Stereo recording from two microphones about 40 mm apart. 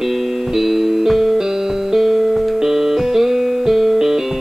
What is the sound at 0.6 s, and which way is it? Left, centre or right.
Music, centre.